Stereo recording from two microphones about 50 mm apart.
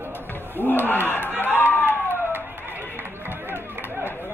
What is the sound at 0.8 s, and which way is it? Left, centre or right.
Battle cry, left.